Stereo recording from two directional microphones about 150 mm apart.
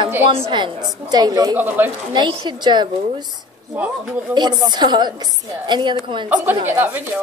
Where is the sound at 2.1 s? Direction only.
30° right (ahead or behind).